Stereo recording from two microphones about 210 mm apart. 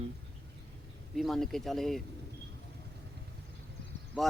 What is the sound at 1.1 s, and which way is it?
Speech, centre (ahead or behind).